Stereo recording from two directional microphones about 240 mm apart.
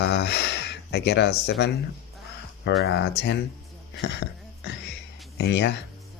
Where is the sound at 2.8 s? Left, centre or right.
Left.